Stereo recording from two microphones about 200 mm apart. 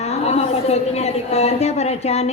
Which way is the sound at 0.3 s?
30° left (ahead or behind).